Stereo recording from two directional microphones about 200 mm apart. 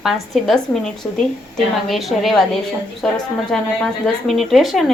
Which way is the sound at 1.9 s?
Centre (ahead or behind).